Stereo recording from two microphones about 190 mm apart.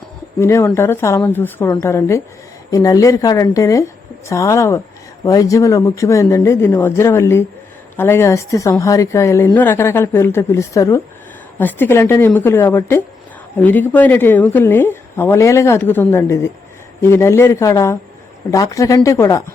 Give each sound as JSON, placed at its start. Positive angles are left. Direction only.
{"t": 0.3, "sound": "a woman's voice", "side_deg": 15}